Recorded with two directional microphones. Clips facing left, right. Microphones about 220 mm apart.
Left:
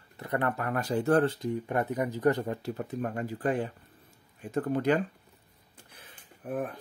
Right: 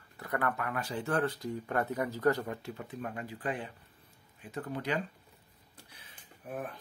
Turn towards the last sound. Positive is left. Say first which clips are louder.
# left 7 dB
turn(degrees=55)  # may be behind; listen again after turning